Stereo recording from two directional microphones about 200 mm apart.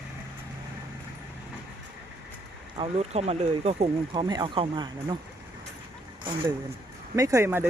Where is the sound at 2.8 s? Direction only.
30° right (ahead or behind).